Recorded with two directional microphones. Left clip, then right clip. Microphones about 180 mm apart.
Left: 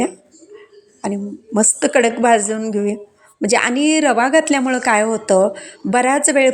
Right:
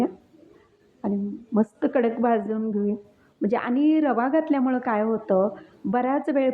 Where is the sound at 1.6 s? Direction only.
15° left (ahead or behind).